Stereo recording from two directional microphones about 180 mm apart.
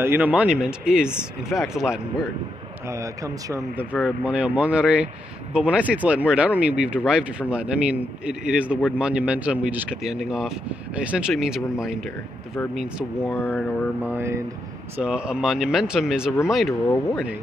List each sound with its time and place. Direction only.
0.0 s speech: 10° right (ahead or behind)
3.4 s speech: 15° right (ahead or behind)
4.0 s speech: 5° right (ahead or behind)
13.2 s speech: 10° left (ahead or behind)
14.0 s speech: 15° right (ahead or behind)
16.8 s speech: 15° left (ahead or behind)